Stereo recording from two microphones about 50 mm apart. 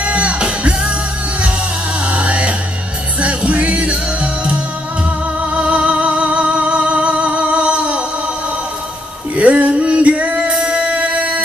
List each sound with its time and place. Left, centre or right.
0.0 s music: right
2.0 s music: right
9.4 s music: right